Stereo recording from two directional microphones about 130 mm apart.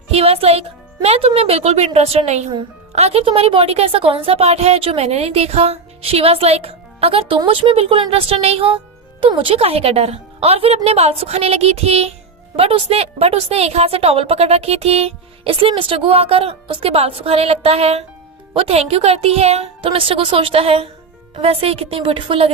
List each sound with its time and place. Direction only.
0.1 s a woman's voice: 50° right (ahead or behind)